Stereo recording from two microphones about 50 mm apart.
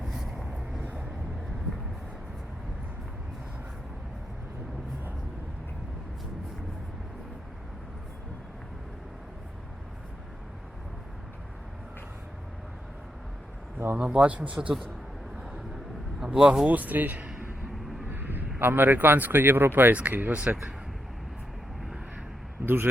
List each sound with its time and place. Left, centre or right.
0.0 s vehicle: centre
14.0 s speech: right
16.2 s speech: centre
16.6 s speech: right
17.7 s vehicle: centre
18.1 s a sound: right
18.6 s speech: right
19.9 s speech: right
22.6 s speech: right